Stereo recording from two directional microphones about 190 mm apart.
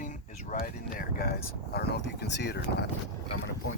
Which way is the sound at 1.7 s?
55° left (ahead or behind).